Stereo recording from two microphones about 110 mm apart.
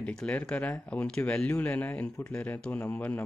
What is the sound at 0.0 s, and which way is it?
Speech, 10° left (ahead or behind).